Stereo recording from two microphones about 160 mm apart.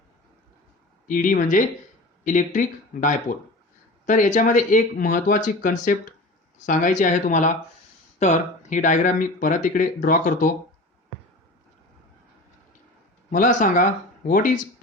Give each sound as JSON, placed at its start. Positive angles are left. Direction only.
{"t": 1.0, "sound": "speech", "side_deg": 55}
{"t": 13.3, "sound": "speech", "side_deg": 55}